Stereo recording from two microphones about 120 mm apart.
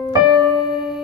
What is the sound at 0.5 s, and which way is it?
Music, 40° left (ahead or behind).